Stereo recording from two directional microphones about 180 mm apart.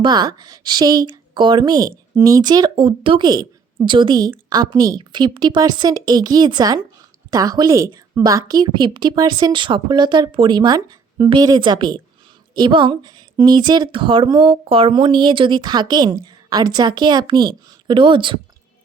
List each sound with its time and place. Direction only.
0.0 s speech: 25° right (ahead or behind)